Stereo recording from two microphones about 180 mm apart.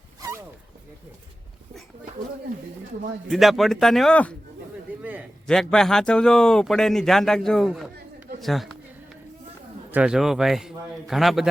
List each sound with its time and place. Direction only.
3.2 s a man's voice: centre (ahead or behind)
5.5 s a man's voice: 5° left (ahead or behind)
9.9 s a man's voice: 5° right (ahead or behind)